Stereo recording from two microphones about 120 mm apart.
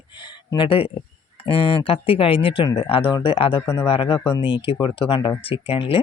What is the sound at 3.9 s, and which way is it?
Speech, 45° left (ahead or behind).